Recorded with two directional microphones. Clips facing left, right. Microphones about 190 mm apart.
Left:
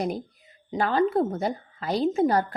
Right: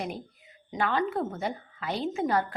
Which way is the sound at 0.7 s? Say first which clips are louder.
Left 5 dB; 35° left (ahead or behind).